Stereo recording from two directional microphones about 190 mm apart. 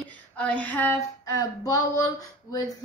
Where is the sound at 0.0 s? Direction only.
5° left (ahead or behind).